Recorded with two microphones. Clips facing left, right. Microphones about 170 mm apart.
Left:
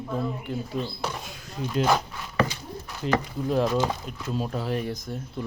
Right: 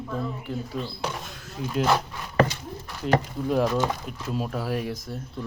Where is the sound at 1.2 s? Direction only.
Centre (ahead or behind).